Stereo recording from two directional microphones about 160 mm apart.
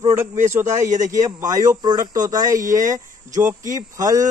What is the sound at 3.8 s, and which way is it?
Speech, 20° right (ahead or behind).